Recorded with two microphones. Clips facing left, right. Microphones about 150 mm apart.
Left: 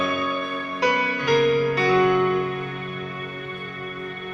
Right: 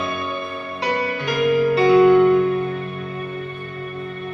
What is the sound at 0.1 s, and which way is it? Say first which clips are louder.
Music: left 1 dB; 30° right (ahead or behind).